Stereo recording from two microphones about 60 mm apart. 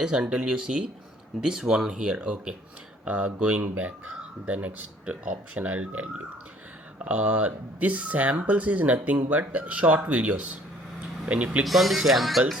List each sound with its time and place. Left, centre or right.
0.1 s speech: centre
11.6 s speech: centre